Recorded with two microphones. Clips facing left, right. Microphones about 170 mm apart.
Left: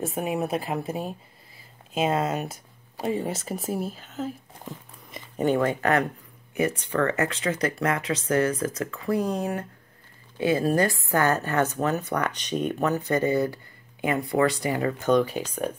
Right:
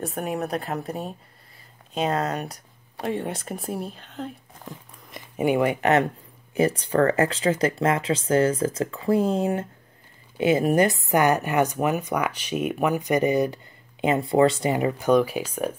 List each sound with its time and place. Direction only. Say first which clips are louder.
0.0 s a woman's voice: left 1 dB; centre (ahead or behind)
5.4 s speech: right 2 dB; 15° right (ahead or behind)
6.5 s speech: right 4 dB; 35° right (ahead or behind); by 15.7 s 10° right (ahead or behind)